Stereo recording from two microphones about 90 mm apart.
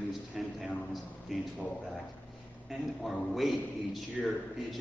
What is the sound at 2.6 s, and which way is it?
A man's voice, centre (ahead or behind).